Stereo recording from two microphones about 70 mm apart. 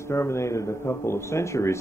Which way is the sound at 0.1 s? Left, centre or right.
Left.